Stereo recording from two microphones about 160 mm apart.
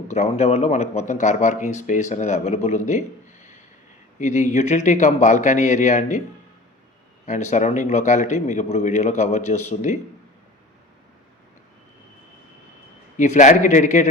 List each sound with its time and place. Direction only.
0.1 s speech: 45° left (ahead or behind)
7.3 s speech: 50° left (ahead or behind)
13.1 s speech: 50° left (ahead or behind)